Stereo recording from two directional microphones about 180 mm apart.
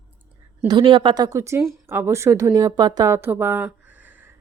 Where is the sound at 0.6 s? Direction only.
25° right (ahead or behind).